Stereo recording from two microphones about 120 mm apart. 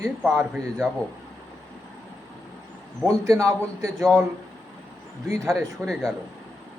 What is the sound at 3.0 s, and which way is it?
Speech, 25° right (ahead or behind).